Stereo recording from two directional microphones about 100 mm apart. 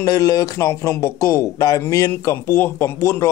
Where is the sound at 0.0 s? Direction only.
35° left (ahead or behind).